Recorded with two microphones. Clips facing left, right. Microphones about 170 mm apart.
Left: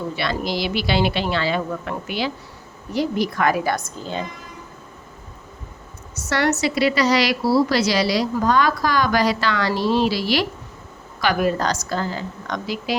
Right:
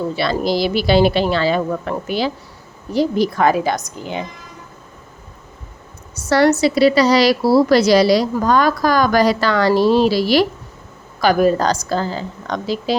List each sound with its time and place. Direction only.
0.2 s a woman's voice: 35° right (ahead or behind); by 4.3 s 15° right (ahead or behind)
6.2 s a woman's voice: 35° right (ahead or behind)